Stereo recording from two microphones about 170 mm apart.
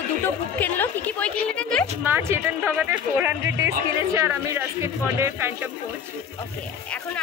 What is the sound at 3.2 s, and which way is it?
Music, 15° right (ahead or behind).